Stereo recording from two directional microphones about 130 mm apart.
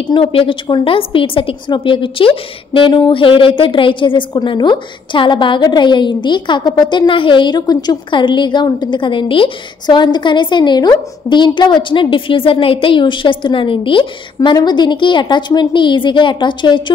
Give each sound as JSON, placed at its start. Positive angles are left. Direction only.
{"t": 0.0, "sound": "a woman's voice", "side_deg": 40}